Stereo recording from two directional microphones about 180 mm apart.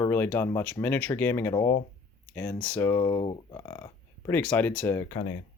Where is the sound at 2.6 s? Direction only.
10° left (ahead or behind).